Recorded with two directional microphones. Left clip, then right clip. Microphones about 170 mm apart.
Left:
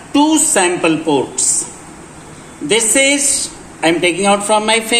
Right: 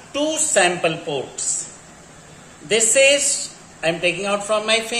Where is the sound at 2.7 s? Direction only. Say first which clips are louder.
Left 2 dB; 30° left (ahead or behind).